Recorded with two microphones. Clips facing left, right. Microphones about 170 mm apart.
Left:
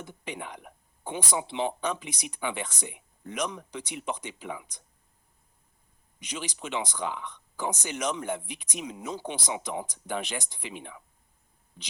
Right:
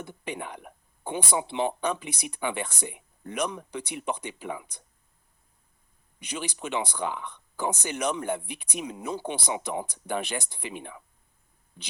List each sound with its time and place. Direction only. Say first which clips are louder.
0.0 s speech: right 3 dB; 50° right (ahead or behind)
6.1 s speech: right 2 dB; 55° right (ahead or behind)